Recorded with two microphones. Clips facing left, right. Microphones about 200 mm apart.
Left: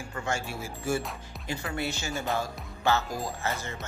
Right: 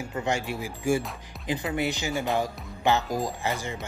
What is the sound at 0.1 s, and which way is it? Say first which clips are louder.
Speech: right 4 dB; 20° right (ahead or behind).